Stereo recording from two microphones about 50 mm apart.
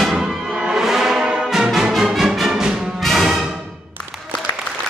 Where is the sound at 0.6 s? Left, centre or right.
Centre.